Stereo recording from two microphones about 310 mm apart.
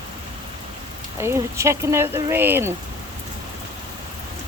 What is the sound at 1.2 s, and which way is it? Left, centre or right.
Speech, centre.